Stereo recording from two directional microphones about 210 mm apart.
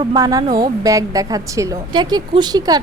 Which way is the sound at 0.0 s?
20° right (ahead or behind).